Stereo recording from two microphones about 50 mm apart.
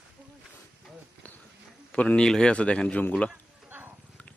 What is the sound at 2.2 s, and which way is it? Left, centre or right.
Speech, centre.